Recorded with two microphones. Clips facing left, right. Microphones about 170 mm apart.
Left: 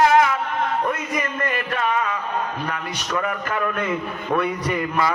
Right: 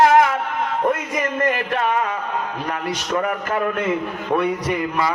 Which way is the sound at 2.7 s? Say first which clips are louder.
Right 4 dB; 40° right (ahead or behind).